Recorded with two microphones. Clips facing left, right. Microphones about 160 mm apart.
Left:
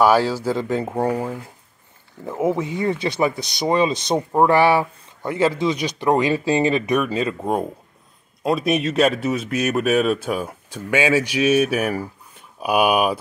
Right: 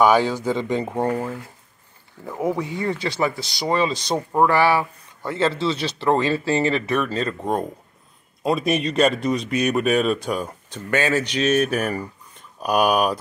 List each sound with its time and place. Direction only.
0.0 s speech: 5° left (ahead or behind)